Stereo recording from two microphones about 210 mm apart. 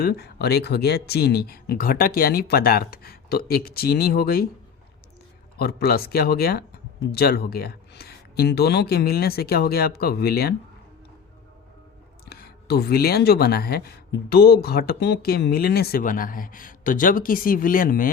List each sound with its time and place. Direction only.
0.0 s speech: 50° left (ahead or behind)
5.5 s speech: 45° left (ahead or behind)
12.2 s speech: 45° left (ahead or behind)